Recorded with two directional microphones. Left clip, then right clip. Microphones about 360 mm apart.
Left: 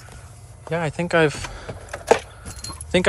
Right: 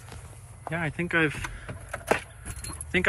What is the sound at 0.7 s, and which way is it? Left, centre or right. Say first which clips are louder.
Speech: left 6 dB; centre.